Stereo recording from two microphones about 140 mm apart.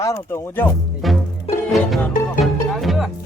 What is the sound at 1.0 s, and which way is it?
Music, centre (ahead or behind).